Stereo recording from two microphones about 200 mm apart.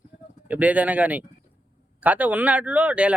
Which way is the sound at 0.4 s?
5° right (ahead or behind).